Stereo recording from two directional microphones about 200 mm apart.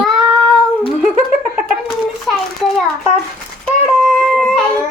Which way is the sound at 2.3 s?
Centre (ahead or behind).